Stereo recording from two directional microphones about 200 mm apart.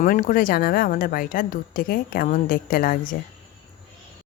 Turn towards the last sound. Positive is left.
turn(degrees=45)  # may be behind; listen again after turning